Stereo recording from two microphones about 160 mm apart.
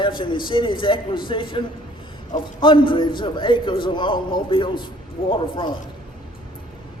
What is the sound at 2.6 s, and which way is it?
A man's voice, 30° left (ahead or behind).